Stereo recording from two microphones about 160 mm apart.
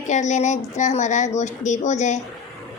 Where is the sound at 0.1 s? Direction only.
45° left (ahead or behind).